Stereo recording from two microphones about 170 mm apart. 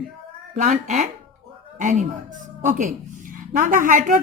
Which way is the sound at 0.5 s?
45° right (ahead or behind).